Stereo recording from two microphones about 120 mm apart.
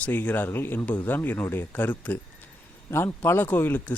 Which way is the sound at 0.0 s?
15° left (ahead or behind).